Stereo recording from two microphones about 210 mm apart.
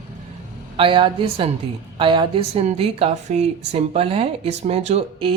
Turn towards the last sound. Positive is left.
turn(degrees=-25)  # may be behind; listen again after turning